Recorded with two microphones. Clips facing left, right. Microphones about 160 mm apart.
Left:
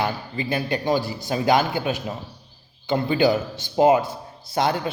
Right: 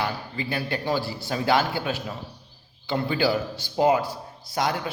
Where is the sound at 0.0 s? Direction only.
20° left (ahead or behind).